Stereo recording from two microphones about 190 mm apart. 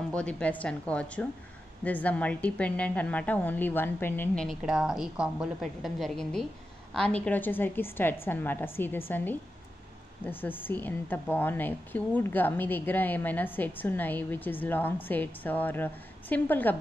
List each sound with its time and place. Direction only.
0.1 s a woman's voice: 5° left (ahead or behind)
4.5 s a woman's voice: centre (ahead or behind)